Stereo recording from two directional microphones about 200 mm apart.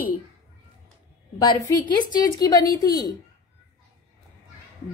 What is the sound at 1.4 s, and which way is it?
A woman's voice, 20° left (ahead or behind).